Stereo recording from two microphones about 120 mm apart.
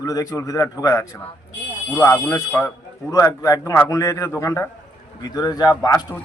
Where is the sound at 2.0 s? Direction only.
25° left (ahead or behind).